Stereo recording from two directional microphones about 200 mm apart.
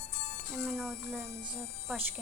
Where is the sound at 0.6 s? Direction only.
Centre (ahead or behind).